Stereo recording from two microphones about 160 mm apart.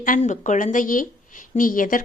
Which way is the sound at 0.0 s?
55° left (ahead or behind).